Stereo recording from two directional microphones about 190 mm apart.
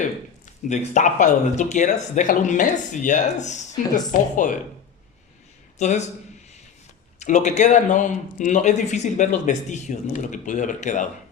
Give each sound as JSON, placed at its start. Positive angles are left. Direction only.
{"t": 0.7, "sound": "speech", "side_deg": 40}
{"t": 5.8, "sound": "speech", "side_deg": 40}
{"t": 7.2, "sound": "speech", "side_deg": 40}